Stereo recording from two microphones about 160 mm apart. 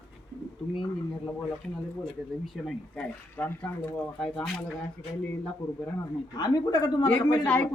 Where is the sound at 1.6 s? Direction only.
Centre (ahead or behind).